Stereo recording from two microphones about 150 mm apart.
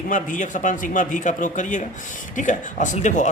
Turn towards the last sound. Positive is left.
turn(degrees=55)  # may be behind; listen again after turning